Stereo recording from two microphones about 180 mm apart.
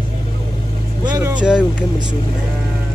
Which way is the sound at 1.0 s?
25° right (ahead or behind).